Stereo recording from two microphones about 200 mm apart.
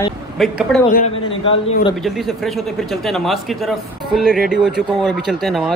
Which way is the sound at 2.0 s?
Centre (ahead or behind).